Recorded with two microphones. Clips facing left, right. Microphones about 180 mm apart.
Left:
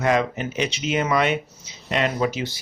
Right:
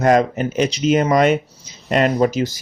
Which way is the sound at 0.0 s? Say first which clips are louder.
Right 6 dB; 45° right (ahead or behind).